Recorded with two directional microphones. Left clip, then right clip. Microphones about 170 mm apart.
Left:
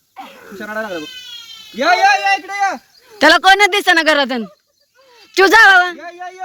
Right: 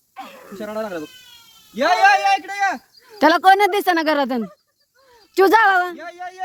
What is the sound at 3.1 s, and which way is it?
Speech, 20° right (ahead or behind).